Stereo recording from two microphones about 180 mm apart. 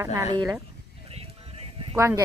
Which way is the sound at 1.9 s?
15° right (ahead or behind).